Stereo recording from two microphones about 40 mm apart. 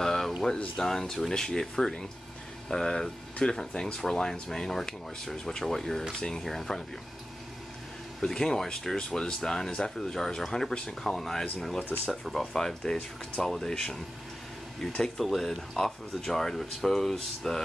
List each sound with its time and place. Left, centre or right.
0.0 s a sound: centre
0.7 s speech: centre
8.2 s speech: centre
12.5 s speech: centre
15.1 s speech: centre